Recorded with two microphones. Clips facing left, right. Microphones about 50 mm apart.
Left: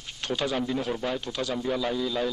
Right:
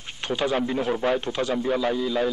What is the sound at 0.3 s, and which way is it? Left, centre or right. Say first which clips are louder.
A man's voice: right 4 dB; right.